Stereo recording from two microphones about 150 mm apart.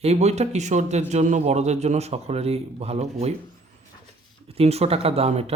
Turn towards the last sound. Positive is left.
turn(degrees=-45)  # may be behind; listen again after turning